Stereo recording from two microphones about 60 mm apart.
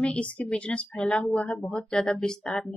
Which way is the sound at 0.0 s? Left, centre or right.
Centre.